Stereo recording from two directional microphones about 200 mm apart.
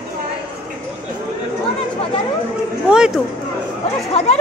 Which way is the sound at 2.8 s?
5° right (ahead or behind).